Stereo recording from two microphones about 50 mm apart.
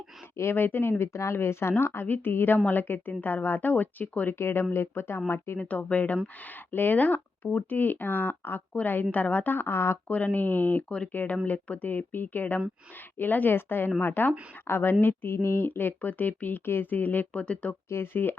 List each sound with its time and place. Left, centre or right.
0.5 s speech: left
4.4 s speech: left
5.5 s speech: left
9.6 s speech: left
10.1 s speech: left
10.8 s speech: left
11.1 s speech: left
17.4 s speech: left
17.8 s speech: left